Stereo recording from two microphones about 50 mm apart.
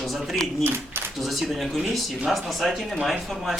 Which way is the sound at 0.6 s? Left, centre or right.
Right.